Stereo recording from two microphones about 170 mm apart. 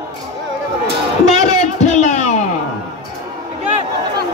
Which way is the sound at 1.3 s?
40° left (ahead or behind).